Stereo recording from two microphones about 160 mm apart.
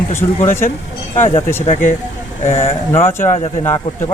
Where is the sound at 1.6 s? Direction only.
45° left (ahead or behind).